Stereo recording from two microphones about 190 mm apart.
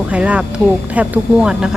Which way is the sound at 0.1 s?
5° right (ahead or behind).